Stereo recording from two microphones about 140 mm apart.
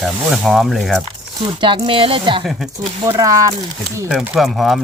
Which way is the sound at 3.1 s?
25° right (ahead or behind).